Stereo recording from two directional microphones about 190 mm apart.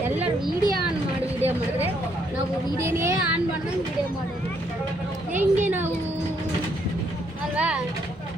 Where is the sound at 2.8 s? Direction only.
15° right (ahead or behind).